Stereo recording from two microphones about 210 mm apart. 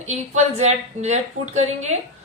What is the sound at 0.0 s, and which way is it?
A woman's voice, 30° right (ahead or behind).